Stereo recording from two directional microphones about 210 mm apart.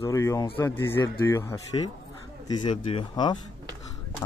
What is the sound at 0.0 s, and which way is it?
Speech, 15° left (ahead or behind).